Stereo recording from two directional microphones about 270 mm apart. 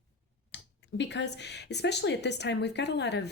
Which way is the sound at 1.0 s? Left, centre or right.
Left.